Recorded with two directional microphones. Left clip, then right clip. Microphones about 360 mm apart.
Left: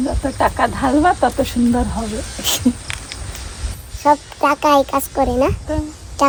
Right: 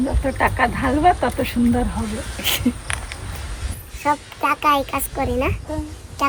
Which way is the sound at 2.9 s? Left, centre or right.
Centre.